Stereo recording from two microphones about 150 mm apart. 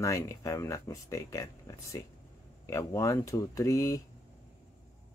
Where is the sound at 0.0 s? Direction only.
20° left (ahead or behind).